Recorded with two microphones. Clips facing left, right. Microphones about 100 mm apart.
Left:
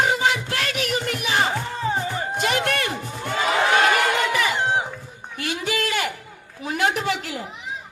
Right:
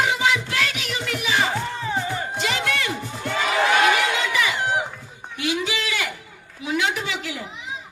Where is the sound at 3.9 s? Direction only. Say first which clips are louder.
Left 2 dB; 45° left (ahead or behind).